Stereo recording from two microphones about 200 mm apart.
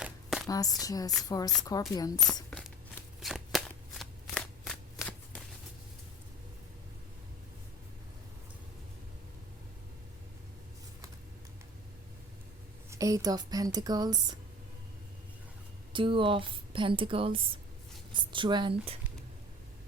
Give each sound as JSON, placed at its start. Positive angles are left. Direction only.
{"t": 0.0, "sound": "a sound", "side_deg": -5}
{"t": 0.4, "sound": "speech", "side_deg": 20}
{"t": 2.5, "sound": "a sound", "side_deg": 0}
{"t": 3.2, "sound": "shuffling cards", "side_deg": 0}
{"t": 12.9, "sound": "a woman's voice", "side_deg": -15}
{"t": 15.9, "sound": "a woman's voice", "side_deg": -25}